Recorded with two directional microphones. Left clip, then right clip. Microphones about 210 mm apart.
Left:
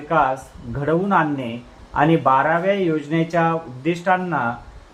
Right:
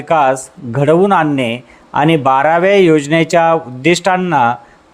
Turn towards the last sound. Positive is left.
turn(degrees=-40)  # may be behind; listen again after turning